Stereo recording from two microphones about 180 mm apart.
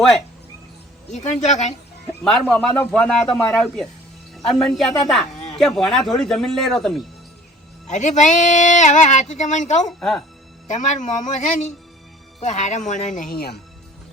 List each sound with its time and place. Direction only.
1.1 s speech: 40° left (ahead or behind)
2.5 s speech: 10° left (ahead or behind)
5.3 s a sound: 40° left (ahead or behind)
5.5 s speech: centre (ahead or behind)
7.9 s speech: 40° left (ahead or behind)
10.0 s speech: centre (ahead or behind)
10.7 s a man's voice: 45° left (ahead or behind); by 13.6 s 60° left (ahead or behind)